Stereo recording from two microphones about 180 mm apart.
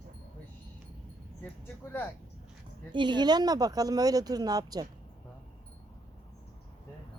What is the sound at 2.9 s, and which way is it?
Speech, 25° right (ahead or behind).